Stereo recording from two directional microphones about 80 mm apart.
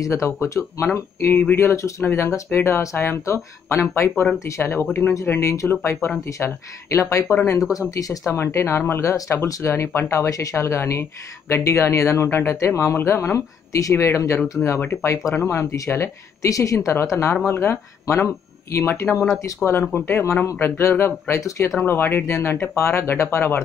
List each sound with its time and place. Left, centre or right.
0.0 s speech: left
4.1 s speech: centre
4.5 s speech: left
8.3 s speech: left
21.8 s speech: left